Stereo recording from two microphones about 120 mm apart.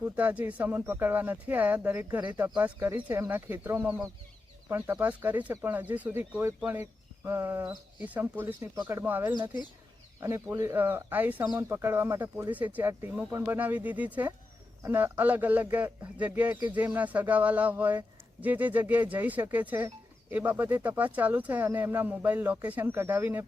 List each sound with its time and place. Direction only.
0.0 s speech: 15° right (ahead or behind)